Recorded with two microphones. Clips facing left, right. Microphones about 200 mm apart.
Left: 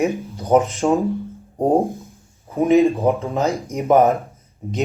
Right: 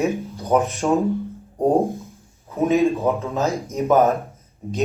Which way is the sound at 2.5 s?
15° left (ahead or behind).